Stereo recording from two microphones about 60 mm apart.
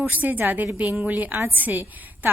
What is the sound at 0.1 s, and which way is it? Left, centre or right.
A woman's voice, right.